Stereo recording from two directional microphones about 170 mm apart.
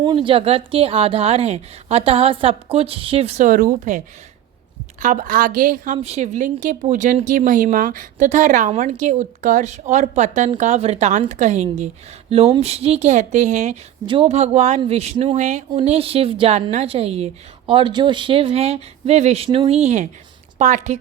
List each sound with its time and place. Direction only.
0.0 s a woman's voice: 30° right (ahead or behind); by 21.0 s 45° right (ahead or behind)